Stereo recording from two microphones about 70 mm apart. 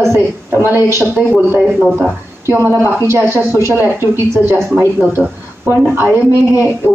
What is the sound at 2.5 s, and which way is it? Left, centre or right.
Speech, right.